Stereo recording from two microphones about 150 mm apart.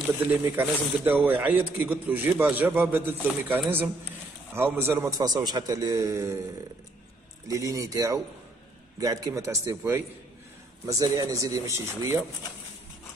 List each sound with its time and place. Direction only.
0.4 s a man's voice: 15° right (ahead or behind)
7.4 s a man's voice: 20° right (ahead or behind)
11.2 s a man's voice: 20° right (ahead or behind)